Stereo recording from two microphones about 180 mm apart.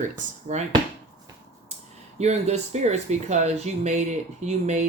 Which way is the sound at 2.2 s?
35° right (ahead or behind).